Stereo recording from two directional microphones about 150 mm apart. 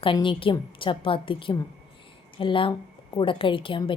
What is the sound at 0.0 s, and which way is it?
Speech, 35° left (ahead or behind).